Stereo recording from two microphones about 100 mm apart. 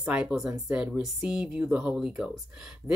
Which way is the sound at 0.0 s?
10° right (ahead or behind).